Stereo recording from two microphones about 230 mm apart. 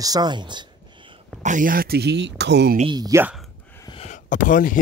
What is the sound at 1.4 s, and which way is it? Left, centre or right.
Speech, right.